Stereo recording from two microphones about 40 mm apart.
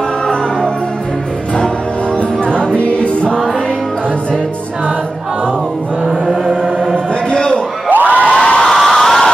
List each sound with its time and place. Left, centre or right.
2.4 s music: left
7.2 s a sound: left
7.9 s crowd: right
8.3 s crowd: left
8.7 s crowd: centre